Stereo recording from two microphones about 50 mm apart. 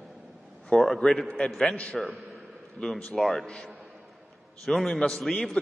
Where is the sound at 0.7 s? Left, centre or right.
Centre.